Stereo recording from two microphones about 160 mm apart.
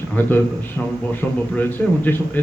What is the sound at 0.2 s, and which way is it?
Speech, 10° left (ahead or behind).